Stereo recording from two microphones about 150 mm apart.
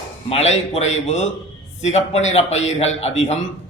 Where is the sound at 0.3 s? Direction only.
45° left (ahead or behind).